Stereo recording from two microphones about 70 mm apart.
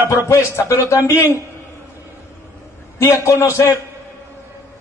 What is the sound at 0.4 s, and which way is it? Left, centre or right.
Speech, left.